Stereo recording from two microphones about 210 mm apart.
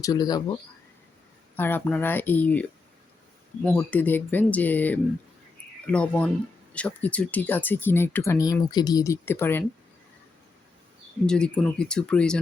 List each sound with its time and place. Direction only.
0.0 s speech: 20° left (ahead or behind)
1.5 s speech: 10° left (ahead or behind)
3.8 s speech: 10° left (ahead or behind)
11.3 s speech: 5° left (ahead or behind)